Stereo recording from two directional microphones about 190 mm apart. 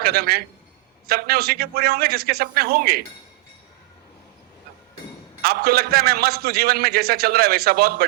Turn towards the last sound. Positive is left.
turn(degrees=-55)  # may be behind; listen again after turning